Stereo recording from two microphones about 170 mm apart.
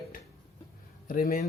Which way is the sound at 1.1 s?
55° left (ahead or behind).